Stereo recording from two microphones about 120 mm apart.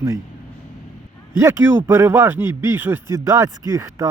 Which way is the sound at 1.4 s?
25° right (ahead or behind).